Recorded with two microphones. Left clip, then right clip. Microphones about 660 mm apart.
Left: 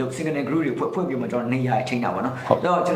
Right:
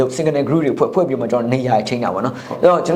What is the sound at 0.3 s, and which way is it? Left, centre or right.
Speech, right.